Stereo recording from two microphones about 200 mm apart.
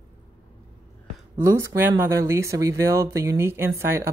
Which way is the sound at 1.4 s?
15° right (ahead or behind).